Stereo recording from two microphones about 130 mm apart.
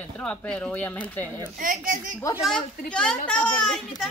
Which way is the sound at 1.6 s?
90° right.